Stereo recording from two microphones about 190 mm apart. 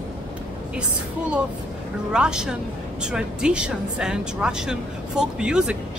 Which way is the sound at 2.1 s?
5° right (ahead or behind).